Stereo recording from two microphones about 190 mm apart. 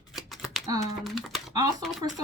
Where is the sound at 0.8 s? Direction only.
Centre (ahead or behind).